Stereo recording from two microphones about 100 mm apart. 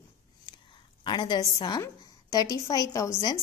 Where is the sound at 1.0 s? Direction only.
50° left (ahead or behind).